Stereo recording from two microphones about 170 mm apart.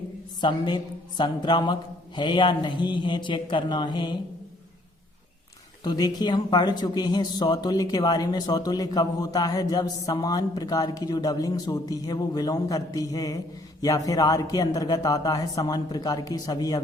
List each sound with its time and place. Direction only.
0.4 s speech: 25° left (ahead or behind)
5.8 s speech: 25° left (ahead or behind)